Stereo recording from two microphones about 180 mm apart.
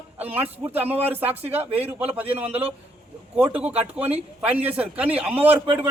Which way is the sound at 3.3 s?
5° right (ahead or behind).